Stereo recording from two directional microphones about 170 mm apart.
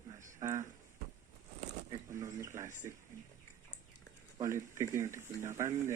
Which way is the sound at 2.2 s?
15° right (ahead or behind).